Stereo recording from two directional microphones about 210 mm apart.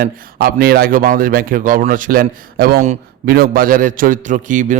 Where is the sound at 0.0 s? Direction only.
45° right (ahead or behind).